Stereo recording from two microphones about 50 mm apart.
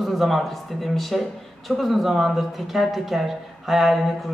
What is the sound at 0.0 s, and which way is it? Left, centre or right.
Speech, centre.